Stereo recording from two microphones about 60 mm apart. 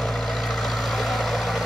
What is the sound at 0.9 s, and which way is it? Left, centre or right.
Vehicle, centre.